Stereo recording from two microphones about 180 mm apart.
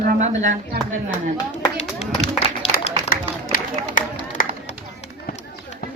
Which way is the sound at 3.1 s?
50° left (ahead or behind).